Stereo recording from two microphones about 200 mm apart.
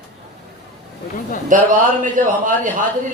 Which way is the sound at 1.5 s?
40° right (ahead or behind).